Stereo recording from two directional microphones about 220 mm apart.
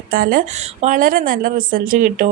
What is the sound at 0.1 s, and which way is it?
A woman's voice, 40° right (ahead or behind).